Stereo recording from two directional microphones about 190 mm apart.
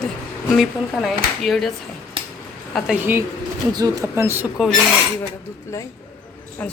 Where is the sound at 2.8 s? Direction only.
Centre (ahead or behind).